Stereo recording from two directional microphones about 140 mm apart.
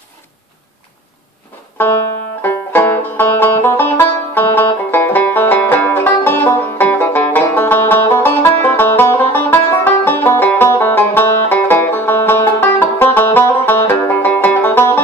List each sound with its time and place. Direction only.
2.4 s banjo: 15° left (ahead or behind)
9.7 s music: 15° left (ahead or behind)